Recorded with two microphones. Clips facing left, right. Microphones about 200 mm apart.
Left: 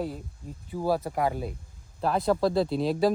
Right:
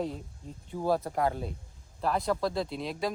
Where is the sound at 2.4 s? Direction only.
30° left (ahead or behind).